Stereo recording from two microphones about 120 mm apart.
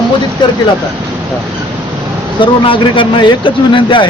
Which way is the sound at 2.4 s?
45° left (ahead or behind).